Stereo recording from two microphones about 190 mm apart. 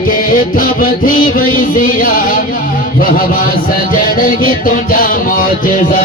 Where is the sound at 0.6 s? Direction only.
45° left (ahead or behind).